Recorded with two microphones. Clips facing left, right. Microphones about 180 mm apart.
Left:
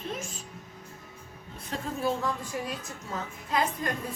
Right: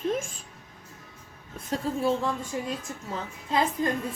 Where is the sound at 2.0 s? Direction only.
25° right (ahead or behind).